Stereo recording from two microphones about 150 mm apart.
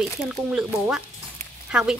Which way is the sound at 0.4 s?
5° right (ahead or behind).